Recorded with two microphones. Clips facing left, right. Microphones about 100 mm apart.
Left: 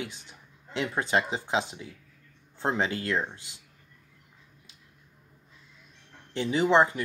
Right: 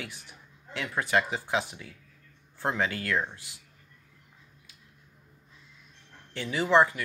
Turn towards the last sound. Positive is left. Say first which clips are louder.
# left 1 dB
turn(degrees=25)  # may be behind; listen again after turning